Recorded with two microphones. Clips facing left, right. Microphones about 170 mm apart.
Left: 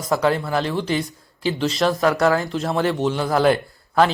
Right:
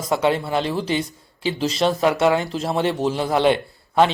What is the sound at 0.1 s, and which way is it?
A man's voice, 25° right (ahead or behind).